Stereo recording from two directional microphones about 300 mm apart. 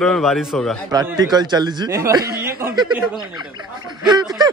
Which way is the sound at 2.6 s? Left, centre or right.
Centre.